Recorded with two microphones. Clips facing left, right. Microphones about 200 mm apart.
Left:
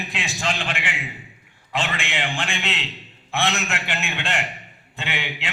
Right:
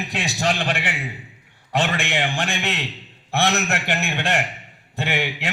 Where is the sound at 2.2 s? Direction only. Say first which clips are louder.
Right 3 dB; 40° right (ahead or behind).